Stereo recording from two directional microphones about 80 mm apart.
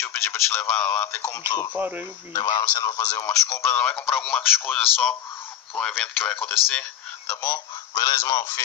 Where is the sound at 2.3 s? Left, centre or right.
Left.